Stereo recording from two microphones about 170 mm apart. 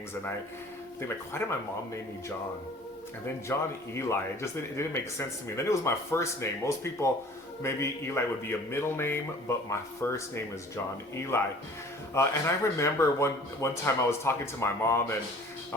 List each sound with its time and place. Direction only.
1.0 s speech: 15° left (ahead or behind)
3.5 s speech: 15° left (ahead or behind)